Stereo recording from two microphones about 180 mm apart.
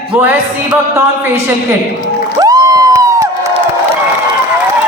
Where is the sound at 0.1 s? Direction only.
10° right (ahead or behind).